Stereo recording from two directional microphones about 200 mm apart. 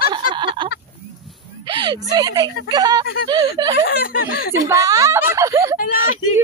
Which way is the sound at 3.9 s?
45° left (ahead or behind).